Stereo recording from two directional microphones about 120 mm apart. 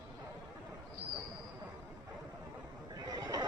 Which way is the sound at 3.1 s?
30° right (ahead or behind).